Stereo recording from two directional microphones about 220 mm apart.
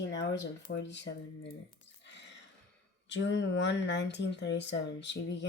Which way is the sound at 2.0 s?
55° left (ahead or behind).